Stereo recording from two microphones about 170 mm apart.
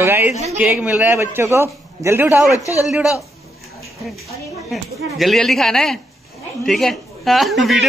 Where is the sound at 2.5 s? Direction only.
20° left (ahead or behind).